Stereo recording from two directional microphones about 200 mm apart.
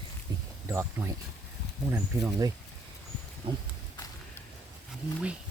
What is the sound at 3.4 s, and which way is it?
Horse, 25° right (ahead or behind).